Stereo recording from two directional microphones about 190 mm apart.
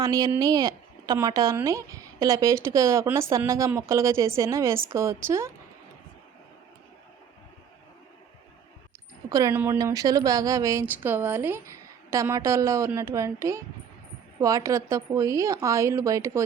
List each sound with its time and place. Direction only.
0.0 s speech: 20° right (ahead or behind)
9.3 s speech: 15° right (ahead or behind)